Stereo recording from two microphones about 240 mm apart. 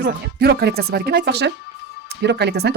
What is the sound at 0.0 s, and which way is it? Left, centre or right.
Speech, right.